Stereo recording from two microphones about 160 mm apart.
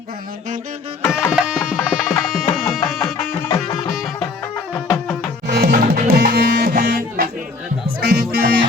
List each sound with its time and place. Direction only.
1.3 s music: 5° right (ahead or behind)
5.5 s music: 80° right; by 7.3 s 65° right (ahead or behind)
8.0 s music: 90° right